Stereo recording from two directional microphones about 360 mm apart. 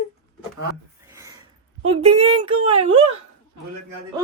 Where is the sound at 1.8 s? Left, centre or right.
Centre.